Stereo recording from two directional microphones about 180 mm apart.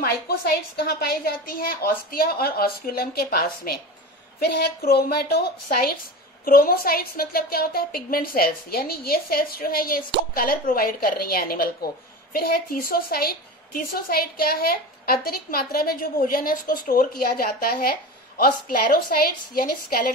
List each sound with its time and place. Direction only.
0.0 s a woman's voice: 55° left (ahead or behind)